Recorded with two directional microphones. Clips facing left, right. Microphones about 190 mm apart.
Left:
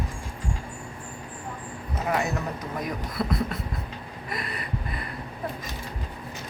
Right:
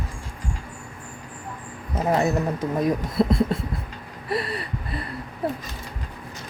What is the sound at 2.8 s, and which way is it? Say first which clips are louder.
Speech: right 9 dB; 25° right (ahead or behind).